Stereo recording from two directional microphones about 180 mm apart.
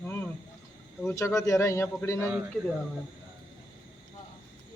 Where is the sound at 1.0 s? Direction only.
15° left (ahead or behind).